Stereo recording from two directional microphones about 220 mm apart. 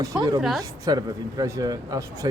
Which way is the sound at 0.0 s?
15° right (ahead or behind).